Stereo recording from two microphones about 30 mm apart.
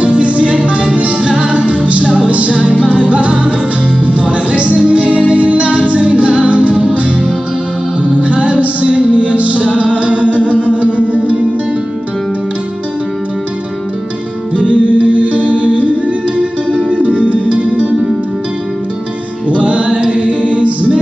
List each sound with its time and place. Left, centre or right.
0.0 s music: right
14.5 s music: right
19.5 s music: right